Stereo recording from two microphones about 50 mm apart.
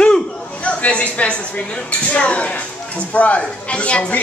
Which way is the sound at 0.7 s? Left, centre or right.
Left.